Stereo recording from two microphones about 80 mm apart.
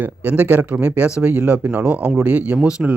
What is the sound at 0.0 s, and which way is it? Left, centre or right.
Speech, centre.